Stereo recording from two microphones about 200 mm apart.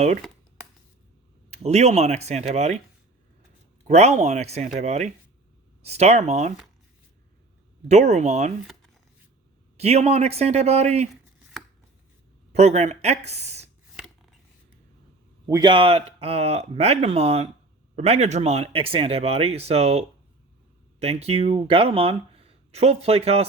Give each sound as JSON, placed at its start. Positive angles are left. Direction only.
{"t": 1.5, "sound": "speech", "side_deg": -35}
{"t": 3.8, "sound": "speech", "side_deg": -35}
{"t": 7.9, "sound": "speech", "side_deg": -35}
{"t": 9.7, "sound": "speech", "side_deg": -30}
{"t": 12.5, "sound": "speech", "side_deg": -35}
{"t": 15.4, "sound": "speech", "side_deg": -20}